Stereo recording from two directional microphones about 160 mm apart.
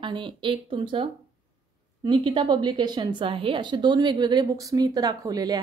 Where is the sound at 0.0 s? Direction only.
30° right (ahead or behind).